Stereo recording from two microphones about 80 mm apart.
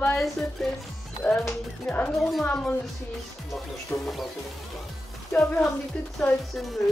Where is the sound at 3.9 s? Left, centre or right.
Left.